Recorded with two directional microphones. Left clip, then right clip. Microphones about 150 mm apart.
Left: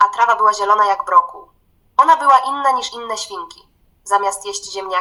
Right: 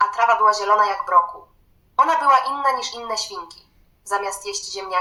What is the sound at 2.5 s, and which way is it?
Speech, 40° left (ahead or behind).